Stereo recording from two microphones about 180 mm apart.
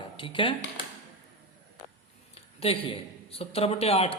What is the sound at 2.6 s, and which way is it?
A man's voice, 30° left (ahead or behind).